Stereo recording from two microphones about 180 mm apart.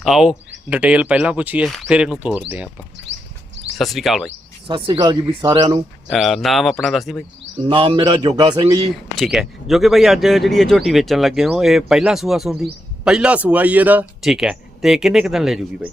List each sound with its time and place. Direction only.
0.0 s speech: centre (ahead or behind)
3.8 s speech: centre (ahead or behind)
4.7 s speech: 25° right (ahead or behind)
6.1 s speech: centre (ahead or behind)
7.7 s speech: 30° right (ahead or behind)
9.1 s speech: centre (ahead or behind)